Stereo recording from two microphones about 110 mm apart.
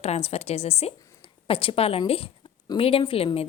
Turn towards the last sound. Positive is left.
turn(degrees=60)  # may be behind; listen again after turning